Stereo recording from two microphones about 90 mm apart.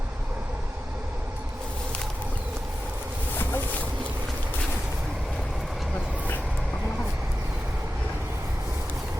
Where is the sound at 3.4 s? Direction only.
20° left (ahead or behind).